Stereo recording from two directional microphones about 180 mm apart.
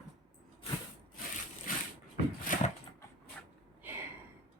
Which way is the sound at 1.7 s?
50° left (ahead or behind).